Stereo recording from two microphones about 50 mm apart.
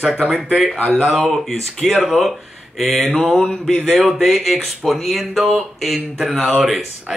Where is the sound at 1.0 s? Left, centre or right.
Centre.